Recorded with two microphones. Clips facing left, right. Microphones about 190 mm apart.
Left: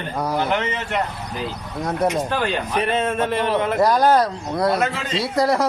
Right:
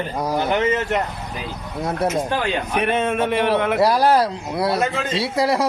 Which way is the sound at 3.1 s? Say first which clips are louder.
Right 2 dB; 10° right (ahead or behind).